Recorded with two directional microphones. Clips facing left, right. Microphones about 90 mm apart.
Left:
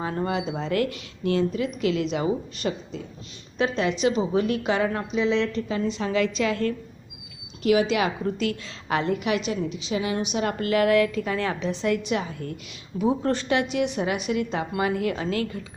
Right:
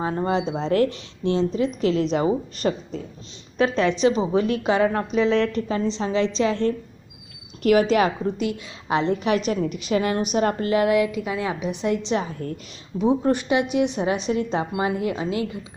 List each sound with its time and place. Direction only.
0.0 s a woman's voice: 25° right (ahead or behind)
4.9 s a woman's voice: 45° right (ahead or behind)
7.6 s a woman's voice: 45° right (ahead or behind)
8.4 s a woman's voice: 20° right (ahead or behind)
9.1 s a woman's voice: 35° right (ahead or behind)
10.6 s a woman's voice: 25° right (ahead or behind)
13.0 s a woman's voice: 20° right (ahead or behind)